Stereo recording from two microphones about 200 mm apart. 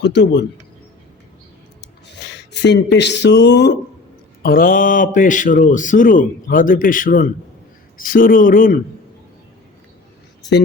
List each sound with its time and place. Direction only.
0.0 s speech: 60° left (ahead or behind)
2.3 s speech: 60° left (ahead or behind)
4.4 s a man's voice: 45° left (ahead or behind)